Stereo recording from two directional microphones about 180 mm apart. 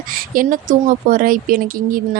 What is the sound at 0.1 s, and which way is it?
Speech, 50° right (ahead or behind).